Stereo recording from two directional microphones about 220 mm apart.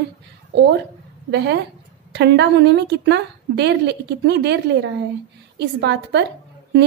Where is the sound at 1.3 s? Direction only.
50° right (ahead or behind).